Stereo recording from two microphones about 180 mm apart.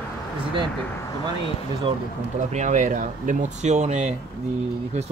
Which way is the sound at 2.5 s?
40° right (ahead or behind).